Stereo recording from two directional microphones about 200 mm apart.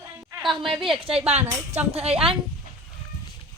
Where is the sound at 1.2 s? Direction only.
35° right (ahead or behind).